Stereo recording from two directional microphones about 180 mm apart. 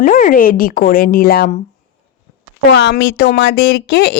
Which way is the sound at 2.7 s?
70° left (ahead or behind).